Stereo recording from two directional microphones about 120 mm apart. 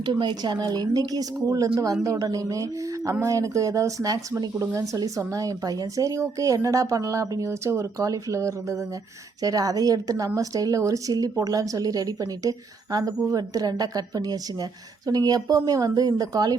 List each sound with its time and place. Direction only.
0.0 s a woman's voice: 40° right (ahead or behind)